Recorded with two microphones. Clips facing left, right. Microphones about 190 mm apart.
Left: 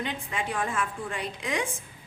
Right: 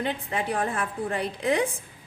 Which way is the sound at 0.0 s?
35° right (ahead or behind).